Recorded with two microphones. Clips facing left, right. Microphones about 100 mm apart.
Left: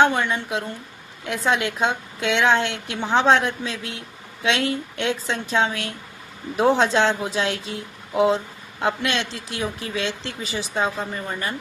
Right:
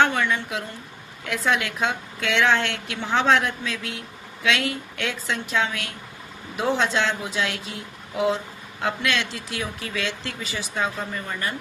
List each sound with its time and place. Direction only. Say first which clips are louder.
0.0 s a woman's voice: left 2 dB; 25° left (ahead or behind)